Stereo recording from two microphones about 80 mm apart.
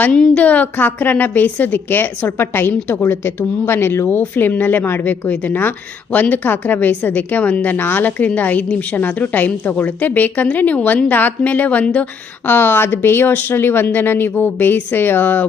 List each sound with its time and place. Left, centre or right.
0.1 s a woman's voice: centre